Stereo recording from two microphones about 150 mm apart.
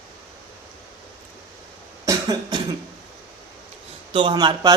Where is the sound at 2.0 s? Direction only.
25° right (ahead or behind).